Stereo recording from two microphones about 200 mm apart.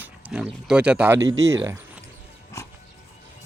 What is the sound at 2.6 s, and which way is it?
Dog, 15° left (ahead or behind).